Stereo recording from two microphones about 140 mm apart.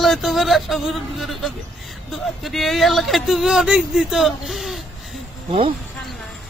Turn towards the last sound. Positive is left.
turn(degrees=-40)  # may be behind; listen again after turning